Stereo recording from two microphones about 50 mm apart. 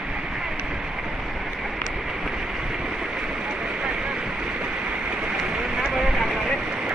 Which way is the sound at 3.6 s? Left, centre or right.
Centre.